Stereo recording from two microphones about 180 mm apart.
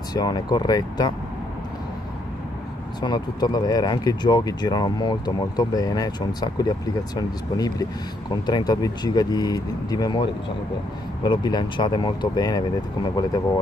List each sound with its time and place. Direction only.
0.1 s speech: 20° left (ahead or behind)
3.0 s speech: 25° left (ahead or behind)
11.2 s speech: 25° left (ahead or behind)